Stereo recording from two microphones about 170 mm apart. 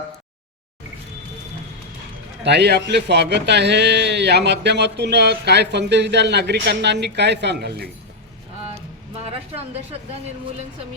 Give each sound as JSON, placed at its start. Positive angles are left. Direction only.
{"t": 2.4, "sound": "speech", "side_deg": -80}